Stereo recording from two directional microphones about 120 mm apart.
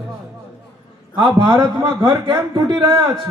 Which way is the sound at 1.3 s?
35° right (ahead or behind).